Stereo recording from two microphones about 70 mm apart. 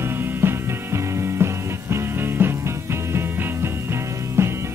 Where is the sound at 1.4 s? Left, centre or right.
Right.